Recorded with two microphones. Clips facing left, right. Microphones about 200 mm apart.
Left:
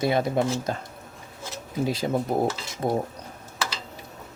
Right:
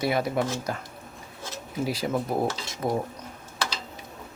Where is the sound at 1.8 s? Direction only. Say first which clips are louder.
Left 2 dB; 25° left (ahead or behind).